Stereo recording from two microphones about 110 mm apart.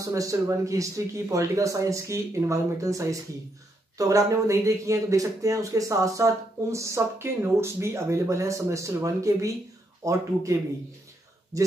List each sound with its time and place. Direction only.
0.1 s speech: 30° right (ahead or behind)
11.5 s speech: 30° right (ahead or behind)